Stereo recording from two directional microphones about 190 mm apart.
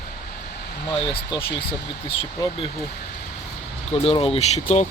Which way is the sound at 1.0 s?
25° left (ahead or behind).